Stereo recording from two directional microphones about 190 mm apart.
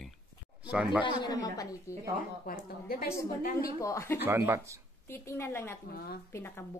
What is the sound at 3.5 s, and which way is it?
Speech, 20° left (ahead or behind).